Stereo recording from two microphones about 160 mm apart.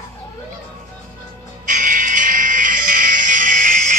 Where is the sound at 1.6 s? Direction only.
55° right (ahead or behind).